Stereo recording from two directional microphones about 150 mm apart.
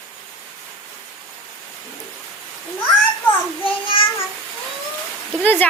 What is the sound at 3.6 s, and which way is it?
Child singing, 35° left (ahead or behind).